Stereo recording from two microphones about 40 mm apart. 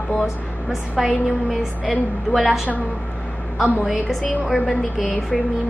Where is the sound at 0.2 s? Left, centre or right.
Centre.